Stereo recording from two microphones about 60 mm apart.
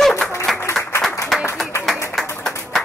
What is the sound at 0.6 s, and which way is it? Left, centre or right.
Applause, left.